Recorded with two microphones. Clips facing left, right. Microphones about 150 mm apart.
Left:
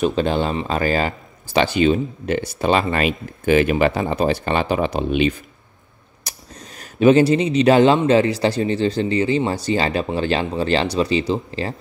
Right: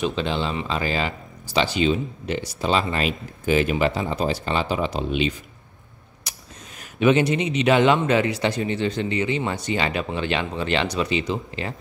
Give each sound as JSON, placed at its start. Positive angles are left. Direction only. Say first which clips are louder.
{"t": 0.0, "sound": "speech", "louder": "left 5 dB", "side_deg": 45}
{"t": 6.3, "sound": "a sound", "louder": "left 3 dB", "side_deg": 40}
{"t": 6.8, "sound": "a man's voice", "louder": "left 5 dB", "side_deg": 35}